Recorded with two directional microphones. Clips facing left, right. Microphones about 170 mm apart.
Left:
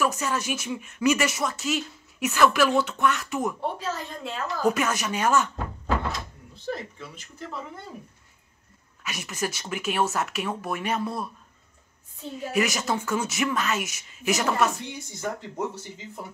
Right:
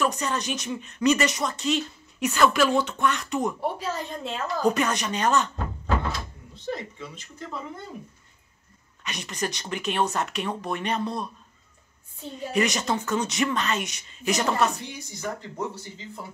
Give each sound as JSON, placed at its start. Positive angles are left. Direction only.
{"t": 0.0, "sound": "speech", "side_deg": 5}
{"t": 3.6, "sound": "a woman's voice", "side_deg": -15}
{"t": 4.6, "sound": "speech", "side_deg": 5}
{"t": 6.7, "sound": "speech", "side_deg": 5}
{"t": 9.0, "sound": "speech", "side_deg": 5}
{"t": 12.4, "sound": "speech", "side_deg": 5}
{"t": 14.9, "sound": "speech", "side_deg": 20}